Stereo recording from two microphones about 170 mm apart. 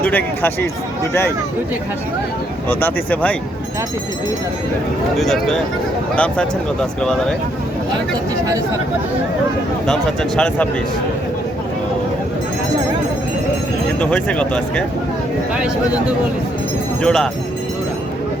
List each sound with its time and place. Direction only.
0.0 s speech: 10° left (ahead or behind)
2.6 s speech: 10° left (ahead or behind)
5.1 s speech: centre (ahead or behind)
8.4 s speech: 20° right (ahead or behind)
9.8 s speech: 5° left (ahead or behind)
14.0 s speech: 5° left (ahead or behind)
15.5 s speech: 5° right (ahead or behind)